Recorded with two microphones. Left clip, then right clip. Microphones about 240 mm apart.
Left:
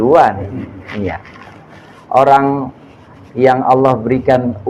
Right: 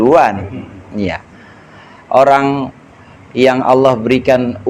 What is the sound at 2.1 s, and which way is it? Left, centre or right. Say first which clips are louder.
A man's voice: even; right.